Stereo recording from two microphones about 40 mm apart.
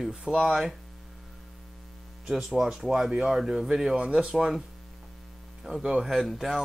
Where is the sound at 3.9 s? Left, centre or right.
Right.